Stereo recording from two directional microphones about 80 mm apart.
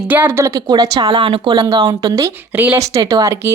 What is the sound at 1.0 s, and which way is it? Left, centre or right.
Speech, right.